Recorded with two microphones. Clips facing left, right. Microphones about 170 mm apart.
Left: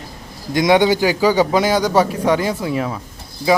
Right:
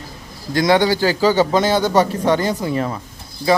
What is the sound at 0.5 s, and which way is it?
Speech, 20° left (ahead or behind).